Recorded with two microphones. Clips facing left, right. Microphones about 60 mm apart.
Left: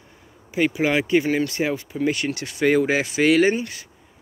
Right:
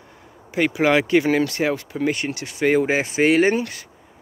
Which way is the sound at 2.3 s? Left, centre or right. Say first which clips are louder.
Even; centre.